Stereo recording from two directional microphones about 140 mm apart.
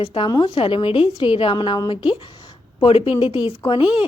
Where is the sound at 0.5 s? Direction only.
40° left (ahead or behind).